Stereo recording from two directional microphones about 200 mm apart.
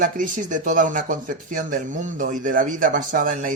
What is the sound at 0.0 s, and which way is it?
Speech, 40° right (ahead or behind).